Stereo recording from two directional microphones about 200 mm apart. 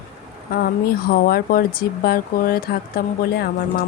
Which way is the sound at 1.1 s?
50° left (ahead or behind).